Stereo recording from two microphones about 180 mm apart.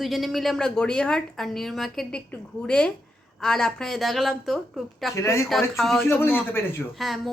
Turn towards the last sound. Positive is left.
turn(degrees=0)  # may be behind; listen again after turning